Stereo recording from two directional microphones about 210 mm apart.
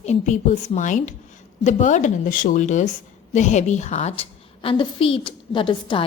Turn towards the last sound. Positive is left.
turn(degrees=25)  # may be behind; listen again after turning